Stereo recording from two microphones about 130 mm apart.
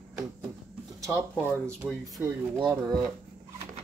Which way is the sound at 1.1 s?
10° left (ahead or behind).